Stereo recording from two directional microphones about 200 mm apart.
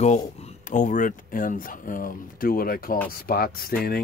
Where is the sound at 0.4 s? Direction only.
35° left (ahead or behind).